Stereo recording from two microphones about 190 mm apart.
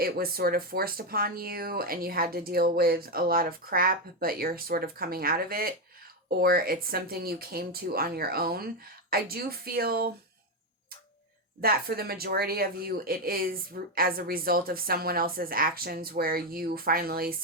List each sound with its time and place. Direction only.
0.0 s a woman's voice: 50° right (ahead or behind)
11.6 s a woman's voice: 50° right (ahead or behind)